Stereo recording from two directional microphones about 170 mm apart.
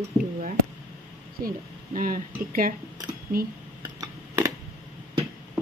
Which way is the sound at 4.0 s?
20° right (ahead or behind).